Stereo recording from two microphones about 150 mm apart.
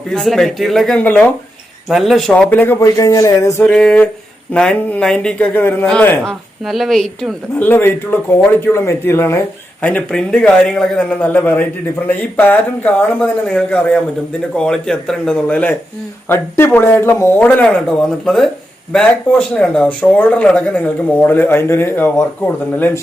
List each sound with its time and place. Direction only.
0.1 s speech: centre (ahead or behind)
1.9 s speech: centre (ahead or behind); by 3.7 s 20° left (ahead or behind)
3.7 s speech: 5° left (ahead or behind)
7.7 s speech: 15° left (ahead or behind)
9.8 s speech: 5° left (ahead or behind)